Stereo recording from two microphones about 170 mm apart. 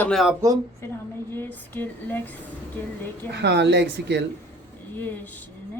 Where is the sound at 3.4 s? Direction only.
90° right.